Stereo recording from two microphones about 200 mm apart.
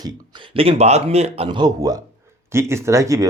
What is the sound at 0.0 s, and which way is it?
Speech, 25° right (ahead or behind).